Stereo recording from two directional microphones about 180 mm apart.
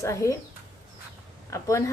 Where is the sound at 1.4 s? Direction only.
15° left (ahead or behind).